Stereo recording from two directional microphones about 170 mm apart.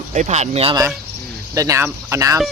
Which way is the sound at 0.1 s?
45° right (ahead or behind).